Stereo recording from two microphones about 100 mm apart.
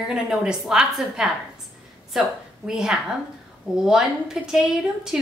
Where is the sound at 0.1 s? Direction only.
5° right (ahead or behind).